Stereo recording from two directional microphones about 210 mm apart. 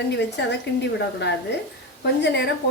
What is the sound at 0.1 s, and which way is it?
A woman's voice, 55° left (ahead or behind).